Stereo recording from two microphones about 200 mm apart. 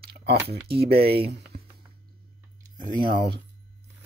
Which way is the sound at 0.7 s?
50° right (ahead or behind).